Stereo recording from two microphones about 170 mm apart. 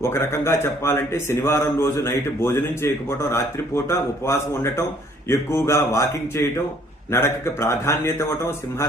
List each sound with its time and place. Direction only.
0.0 s a man's voice: 15° left (ahead or behind)